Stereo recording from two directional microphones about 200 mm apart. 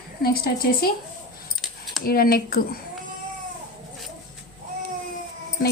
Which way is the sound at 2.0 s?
50° left (ahead or behind).